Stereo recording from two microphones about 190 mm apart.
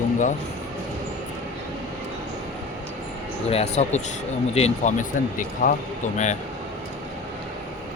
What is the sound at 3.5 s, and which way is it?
Speech, 35° left (ahead or behind).